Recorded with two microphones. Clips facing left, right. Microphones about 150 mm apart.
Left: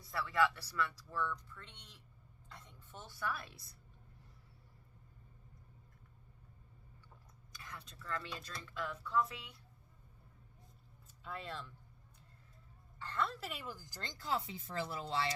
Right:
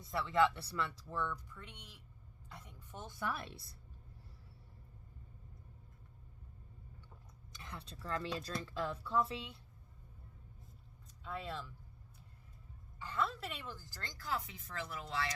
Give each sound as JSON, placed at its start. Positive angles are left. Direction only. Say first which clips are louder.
{"t": 0.0, "sound": "speech", "louder": "right 2 dB", "side_deg": -20}
{"t": 1.1, "sound": "a woman's voice", "louder": "even", "side_deg": -15}
{"t": 7.5, "sound": "speech", "louder": "right 2 dB", "side_deg": -25}
{"t": 11.2, "sound": "speech", "louder": "right 2 dB", "side_deg": 0}
{"t": 13.0, "sound": "speech", "louder": "right 1 dB", "side_deg": -5}